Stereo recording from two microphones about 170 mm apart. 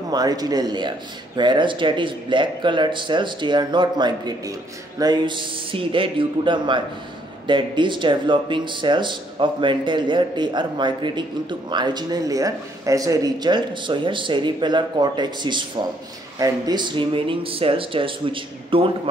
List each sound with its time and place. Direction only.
0.1 s speech: 20° right (ahead or behind)